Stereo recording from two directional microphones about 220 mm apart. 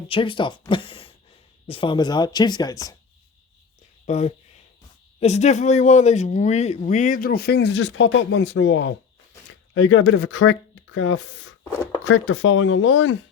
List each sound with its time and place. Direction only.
0.1 s speech: 25° left (ahead or behind)
4.0 s speech: 30° left (ahead or behind); by 13.1 s 65° left (ahead or behind)